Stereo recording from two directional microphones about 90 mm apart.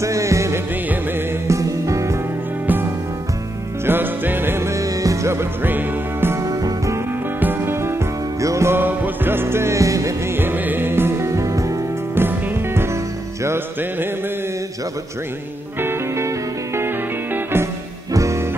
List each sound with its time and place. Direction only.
0.0 s music: 35° right (ahead or behind)
2.6 s music: 20° right (ahead or behind)
6.4 s music: 40° right (ahead or behind)
7.3 s music: 25° right (ahead or behind)
12.2 s music: 25° right (ahead or behind)
15.8 s music: 30° right (ahead or behind)